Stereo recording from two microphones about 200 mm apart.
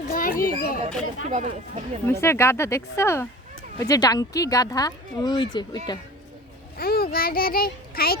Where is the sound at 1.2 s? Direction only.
35° right (ahead or behind).